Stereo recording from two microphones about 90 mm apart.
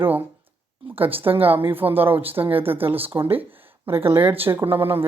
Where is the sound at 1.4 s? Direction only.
20° right (ahead or behind).